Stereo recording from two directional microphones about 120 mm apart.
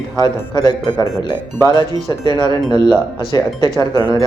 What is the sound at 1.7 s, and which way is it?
Speech, 35° left (ahead or behind).